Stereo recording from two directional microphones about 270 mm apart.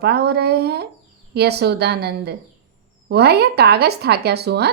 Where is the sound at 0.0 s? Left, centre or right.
Right.